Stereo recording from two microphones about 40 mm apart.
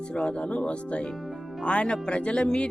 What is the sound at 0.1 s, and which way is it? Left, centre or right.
Speech, left.